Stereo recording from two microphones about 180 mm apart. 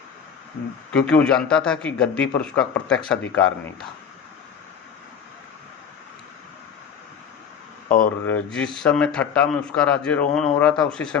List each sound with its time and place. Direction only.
0.9 s a man's voice: 5° left (ahead or behind)
7.9 s speech: 50° left (ahead or behind)
8.2 s a man's voice: 5° left (ahead or behind)